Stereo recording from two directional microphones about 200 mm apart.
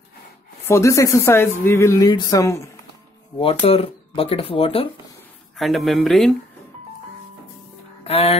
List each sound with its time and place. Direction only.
0.7 s speech: 15° left (ahead or behind)
3.3 s speech: 25° left (ahead or behind)
5.6 s speech: centre (ahead or behind)
8.0 s speech: 30° left (ahead or behind)